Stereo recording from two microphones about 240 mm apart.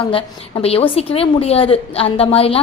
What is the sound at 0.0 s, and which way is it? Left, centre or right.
A woman's voice, left.